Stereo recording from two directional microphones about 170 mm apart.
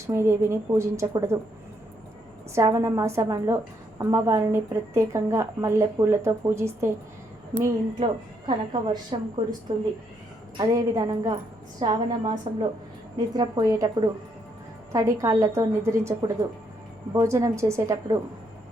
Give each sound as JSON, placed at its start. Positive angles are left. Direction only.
{"t": 0.1, "sound": "a woman's voice", "side_deg": -15}
{"t": 2.6, "sound": "a woman's voice", "side_deg": -20}
{"t": 7.6, "sound": "a woman's voice", "side_deg": -25}
{"t": 10.6, "sound": "a woman's voice", "side_deg": -20}